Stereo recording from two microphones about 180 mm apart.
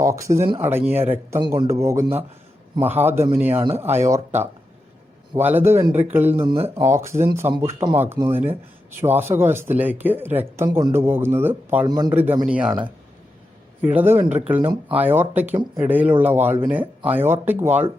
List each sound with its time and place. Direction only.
0.0 s speech: 15° right (ahead or behind)
11.9 s speech: 20° right (ahead or behind)
12.1 s speech: 10° right (ahead or behind)
13.8 s speech: 10° right (ahead or behind)
14.6 s speech: 30° right (ahead or behind)
14.9 s speech: 10° right (ahead or behind)